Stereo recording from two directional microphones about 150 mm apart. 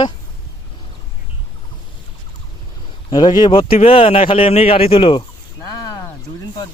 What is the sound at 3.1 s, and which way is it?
A man's voice, 30° left (ahead or behind).